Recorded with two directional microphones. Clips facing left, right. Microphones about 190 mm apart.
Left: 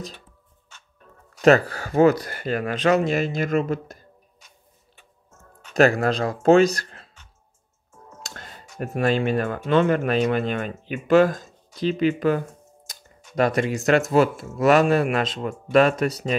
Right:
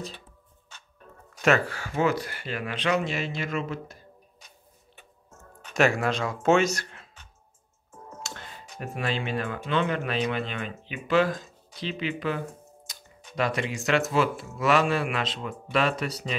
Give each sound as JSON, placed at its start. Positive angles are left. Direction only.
{"t": 1.4, "sound": "speech", "side_deg": 40}
{"t": 5.7, "sound": "speech", "side_deg": 35}
{"t": 8.7, "sound": "speech", "side_deg": 45}
{"t": 12.9, "sound": "a sound", "side_deg": 45}
{"t": 13.4, "sound": "speech", "side_deg": 45}